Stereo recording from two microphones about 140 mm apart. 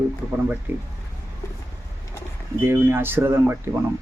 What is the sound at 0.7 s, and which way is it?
Speech, 15° right (ahead or behind).